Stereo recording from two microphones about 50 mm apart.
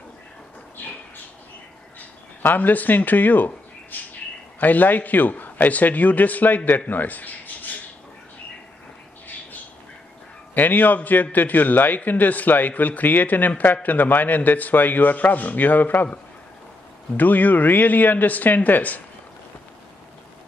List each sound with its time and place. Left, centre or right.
2.4 s a man's voice: left
6.9 s a sound: left
10.5 s a man's voice: left
17.2 s a man's voice: left